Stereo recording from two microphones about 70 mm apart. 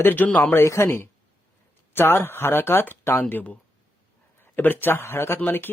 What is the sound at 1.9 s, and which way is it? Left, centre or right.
Speech, left.